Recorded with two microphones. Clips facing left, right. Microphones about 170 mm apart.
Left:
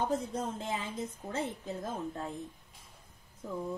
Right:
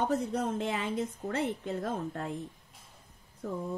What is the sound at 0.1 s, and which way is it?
A woman's voice, 70° right (ahead or behind).